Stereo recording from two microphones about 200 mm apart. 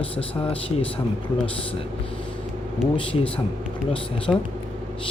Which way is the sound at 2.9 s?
25° left (ahead or behind).